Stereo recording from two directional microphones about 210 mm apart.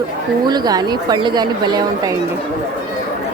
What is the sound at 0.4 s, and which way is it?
Speech, 20° right (ahead or behind).